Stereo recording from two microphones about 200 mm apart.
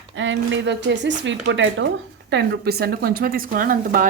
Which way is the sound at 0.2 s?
70° right (ahead or behind).